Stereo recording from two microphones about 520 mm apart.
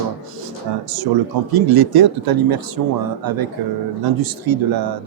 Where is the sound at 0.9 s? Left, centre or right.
Right.